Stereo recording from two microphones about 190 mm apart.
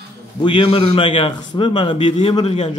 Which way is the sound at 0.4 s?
25° left (ahead or behind).